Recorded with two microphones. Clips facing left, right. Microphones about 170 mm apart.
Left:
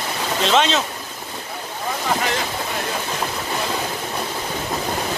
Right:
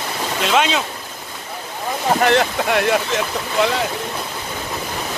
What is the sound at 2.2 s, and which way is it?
Speech, 70° right (ahead or behind).